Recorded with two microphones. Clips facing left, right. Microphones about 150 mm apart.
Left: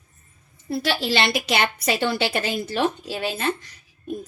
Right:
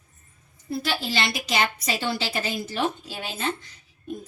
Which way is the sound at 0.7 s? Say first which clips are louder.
Left 4 dB; 75° left (ahead or behind).